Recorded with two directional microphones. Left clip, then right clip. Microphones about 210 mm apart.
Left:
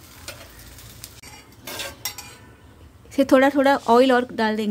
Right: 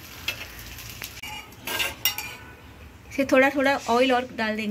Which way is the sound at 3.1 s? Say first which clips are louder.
Left 3 dB; 55° left (ahead or behind).